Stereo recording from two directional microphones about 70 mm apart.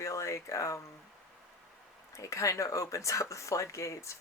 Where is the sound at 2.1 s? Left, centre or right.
Left.